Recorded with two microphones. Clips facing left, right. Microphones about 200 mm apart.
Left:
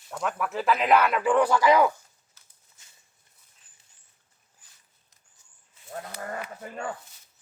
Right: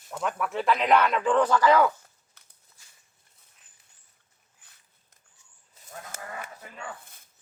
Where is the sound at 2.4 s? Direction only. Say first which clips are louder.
Right 3 dB; 60° right (ahead or behind).